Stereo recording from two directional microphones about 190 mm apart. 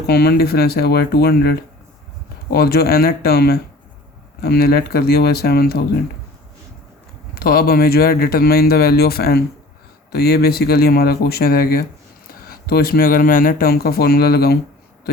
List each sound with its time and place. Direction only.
0.1 s speech: 55° left (ahead or behind)
7.3 s speech: 50° left (ahead or behind)